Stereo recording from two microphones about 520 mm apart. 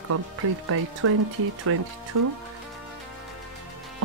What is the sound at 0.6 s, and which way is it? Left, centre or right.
Speech, right.